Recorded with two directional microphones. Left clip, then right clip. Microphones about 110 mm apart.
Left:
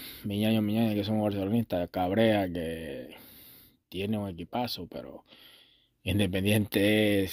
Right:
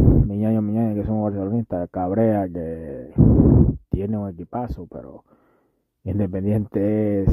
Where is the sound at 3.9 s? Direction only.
55° right (ahead or behind); by 7.2 s 35° right (ahead or behind).